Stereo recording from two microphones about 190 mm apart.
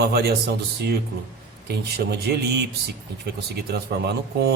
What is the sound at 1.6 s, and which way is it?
Speech, 60° right (ahead or behind).